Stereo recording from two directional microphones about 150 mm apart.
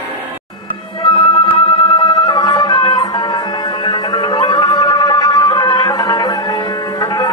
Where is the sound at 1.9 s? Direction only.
30° left (ahead or behind).